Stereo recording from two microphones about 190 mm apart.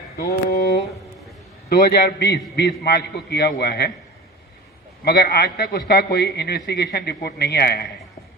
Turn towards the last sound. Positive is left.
turn(degrees=55)  # may be behind; listen again after turning